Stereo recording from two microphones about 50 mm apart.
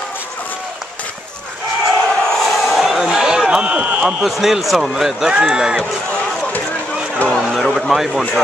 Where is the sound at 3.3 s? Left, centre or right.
Centre.